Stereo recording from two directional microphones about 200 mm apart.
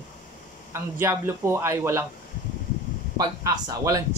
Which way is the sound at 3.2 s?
20° right (ahead or behind).